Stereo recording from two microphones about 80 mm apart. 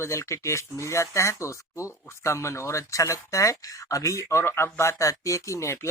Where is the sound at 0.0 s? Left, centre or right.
Left.